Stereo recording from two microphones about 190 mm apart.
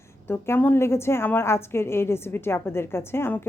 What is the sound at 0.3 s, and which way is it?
A woman's voice, 10° left (ahead or behind).